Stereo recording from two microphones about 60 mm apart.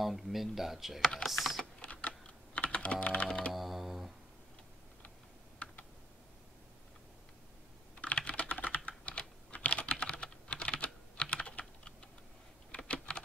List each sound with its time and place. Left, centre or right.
0.0 s speech: centre
1.8 s computer keyboard: left
3.5 s computer keyboard: centre
7.9 s typing: left
9.5 s computer keyboard: left